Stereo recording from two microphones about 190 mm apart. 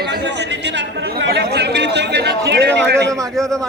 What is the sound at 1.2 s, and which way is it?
Chatter, 60° right (ahead or behind).